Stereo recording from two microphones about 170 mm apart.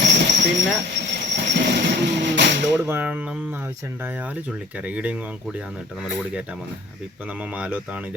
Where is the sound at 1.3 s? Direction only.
85° right.